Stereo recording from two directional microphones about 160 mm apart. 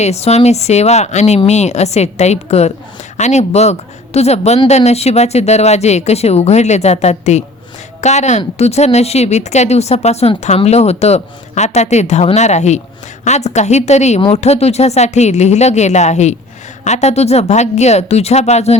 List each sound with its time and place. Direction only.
0.0 s speech: 40° left (ahead or behind)